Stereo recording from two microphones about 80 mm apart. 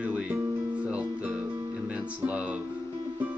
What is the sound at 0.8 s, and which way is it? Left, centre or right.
Music, centre.